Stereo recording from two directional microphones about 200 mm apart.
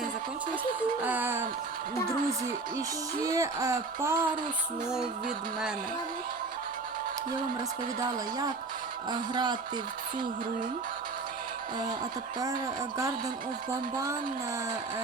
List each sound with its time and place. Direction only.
1.0 s music: 10° right (ahead or behind)
3.2 s speech: 15° right (ahead or behind)
7.9 s speech: 20° right (ahead or behind)